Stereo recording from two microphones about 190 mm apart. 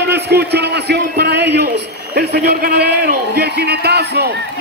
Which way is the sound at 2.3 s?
55° right (ahead or behind).